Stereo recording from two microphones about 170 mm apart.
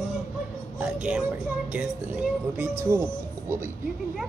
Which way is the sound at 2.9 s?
15° right (ahead or behind).